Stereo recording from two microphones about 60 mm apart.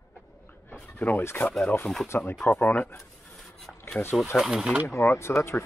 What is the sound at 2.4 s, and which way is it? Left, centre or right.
Speech, left.